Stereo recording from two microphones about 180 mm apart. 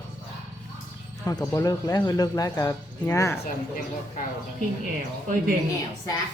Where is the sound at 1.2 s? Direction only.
20° left (ahead or behind).